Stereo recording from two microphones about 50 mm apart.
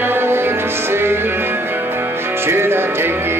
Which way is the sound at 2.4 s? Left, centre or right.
Right.